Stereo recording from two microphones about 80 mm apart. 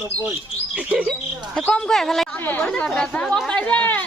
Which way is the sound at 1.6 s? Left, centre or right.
Centre.